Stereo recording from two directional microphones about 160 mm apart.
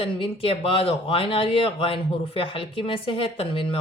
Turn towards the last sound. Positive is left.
turn(degrees=35)  # may be behind; listen again after turning